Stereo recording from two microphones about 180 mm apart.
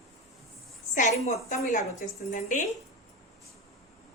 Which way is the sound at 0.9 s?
40° left (ahead or behind).